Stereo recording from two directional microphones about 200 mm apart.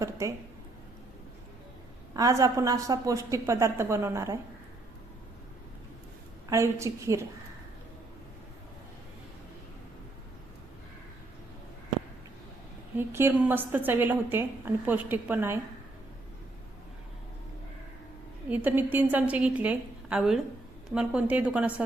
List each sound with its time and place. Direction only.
0.0 s a woman's voice: 15° right (ahead or behind)
2.1 s a woman's voice: 15° right (ahead or behind)
6.5 s a woman's voice: 15° right (ahead or behind)
13.0 s a woman's voice: 10° right (ahead or behind)
18.4 s a woman's voice: 10° right (ahead or behind)